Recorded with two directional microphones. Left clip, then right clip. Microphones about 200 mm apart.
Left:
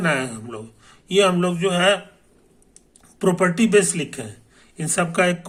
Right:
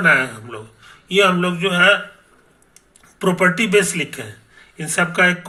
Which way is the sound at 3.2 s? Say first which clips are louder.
Right 3 dB; 10° left (ahead or behind).